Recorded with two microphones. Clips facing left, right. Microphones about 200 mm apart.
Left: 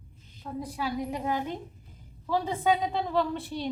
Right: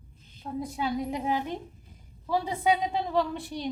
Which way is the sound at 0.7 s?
25° right (ahead or behind).